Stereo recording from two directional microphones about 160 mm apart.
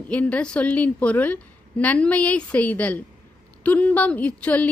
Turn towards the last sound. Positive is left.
turn(degrees=10)  # may be behind; listen again after turning